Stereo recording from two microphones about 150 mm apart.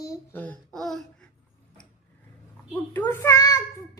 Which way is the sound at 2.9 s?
15° left (ahead or behind).